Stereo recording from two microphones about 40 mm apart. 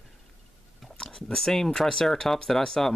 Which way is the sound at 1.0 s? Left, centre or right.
Centre.